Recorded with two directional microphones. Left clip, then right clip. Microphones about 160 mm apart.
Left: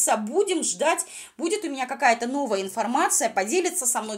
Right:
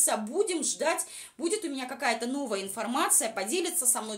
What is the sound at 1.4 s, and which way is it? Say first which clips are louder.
A woman's voice: left 5 dB; 25° left (ahead or behind).